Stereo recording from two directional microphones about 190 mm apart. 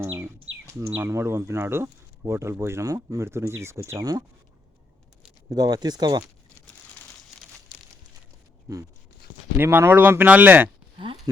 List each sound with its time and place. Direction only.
0.0 s bird: 15° right (ahead or behind)
0.8 s speech: 10° right (ahead or behind)
5.5 s speech: 20° right (ahead or behind)
8.7 s speech: 20° right (ahead or behind)
10.9 s a sound: 25° right (ahead or behind)